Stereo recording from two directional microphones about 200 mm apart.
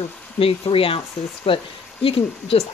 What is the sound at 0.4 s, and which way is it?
Speech, 30° left (ahead or behind).